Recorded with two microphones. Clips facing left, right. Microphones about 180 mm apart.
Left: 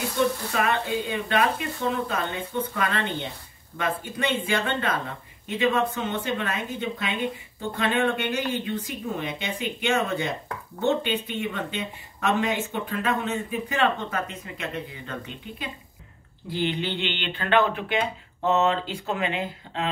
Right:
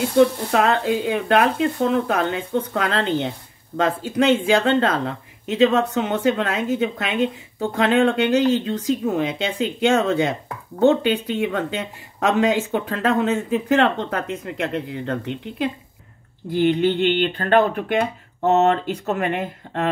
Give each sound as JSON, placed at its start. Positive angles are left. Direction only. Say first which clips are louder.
{"t": 0.2, "sound": "speech", "louder": "right 8 dB", "side_deg": -70}
{"t": 16.4, "sound": "speech", "louder": "right 9 dB", "side_deg": -50}